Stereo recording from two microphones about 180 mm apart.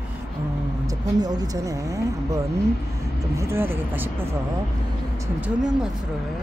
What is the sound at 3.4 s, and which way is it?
Speech, 15° right (ahead or behind).